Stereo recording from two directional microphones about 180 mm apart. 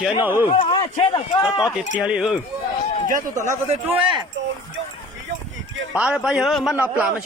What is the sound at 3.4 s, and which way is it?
Speech, 35° right (ahead or behind).